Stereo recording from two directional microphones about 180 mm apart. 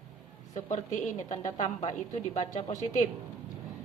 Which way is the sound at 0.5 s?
40° left (ahead or behind).